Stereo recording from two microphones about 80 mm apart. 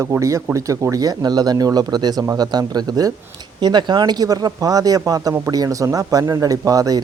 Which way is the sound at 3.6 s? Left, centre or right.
Right.